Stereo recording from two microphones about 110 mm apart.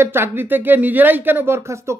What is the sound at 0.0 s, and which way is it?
Speech, 20° right (ahead or behind).